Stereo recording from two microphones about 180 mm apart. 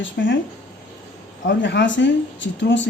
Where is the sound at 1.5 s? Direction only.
80° left.